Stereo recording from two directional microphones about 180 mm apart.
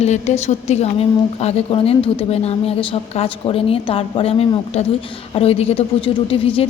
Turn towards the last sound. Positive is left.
turn(degrees=30)  # may be behind; listen again after turning